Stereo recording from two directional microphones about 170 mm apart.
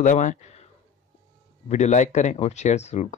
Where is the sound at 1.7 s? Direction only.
45° left (ahead or behind).